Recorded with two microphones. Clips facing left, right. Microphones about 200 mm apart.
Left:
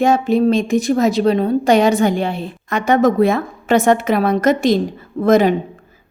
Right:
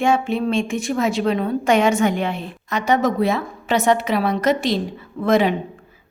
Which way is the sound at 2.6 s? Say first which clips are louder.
Left 5 dB; 50° left (ahead or behind).